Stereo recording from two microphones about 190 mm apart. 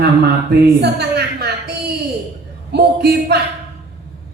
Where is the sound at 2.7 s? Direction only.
55° right (ahead or behind).